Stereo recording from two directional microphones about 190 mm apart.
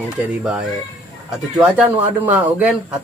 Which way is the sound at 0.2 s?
5° right (ahead or behind).